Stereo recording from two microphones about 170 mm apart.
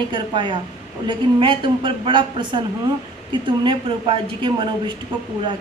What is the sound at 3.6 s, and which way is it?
A woman's voice, 30° right (ahead or behind).